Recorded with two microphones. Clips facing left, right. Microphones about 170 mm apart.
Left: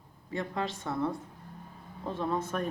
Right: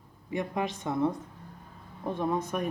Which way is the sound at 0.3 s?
15° right (ahead or behind).